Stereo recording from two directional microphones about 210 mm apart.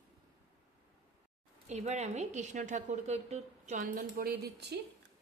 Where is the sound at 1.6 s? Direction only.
30° right (ahead or behind); by 4.8 s 50° right (ahead or behind).